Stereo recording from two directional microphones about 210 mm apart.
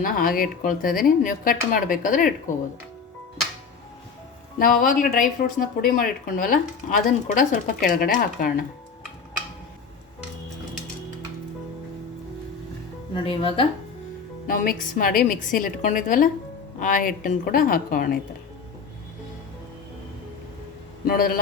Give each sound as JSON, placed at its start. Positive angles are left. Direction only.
{"t": 0.0, "sound": "speech", "side_deg": 40}
{"t": 4.5, "sound": "speech", "side_deg": 40}
{"t": 13.1, "sound": "speech", "side_deg": 25}
{"t": 14.4, "sound": "speech", "side_deg": 45}
{"t": 21.1, "sound": "a man's voice", "side_deg": 45}